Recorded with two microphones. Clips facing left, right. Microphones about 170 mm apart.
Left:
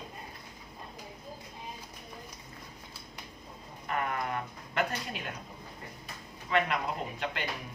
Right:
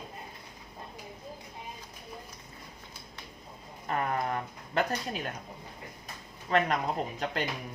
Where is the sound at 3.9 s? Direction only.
35° right (ahead or behind).